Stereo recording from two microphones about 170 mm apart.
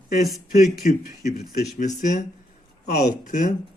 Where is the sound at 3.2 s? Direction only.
45° left (ahead or behind).